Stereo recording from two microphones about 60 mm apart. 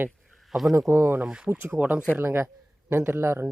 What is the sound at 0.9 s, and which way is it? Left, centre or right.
Speech, right.